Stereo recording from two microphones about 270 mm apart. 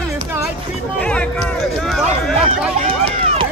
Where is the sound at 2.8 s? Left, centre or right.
Right.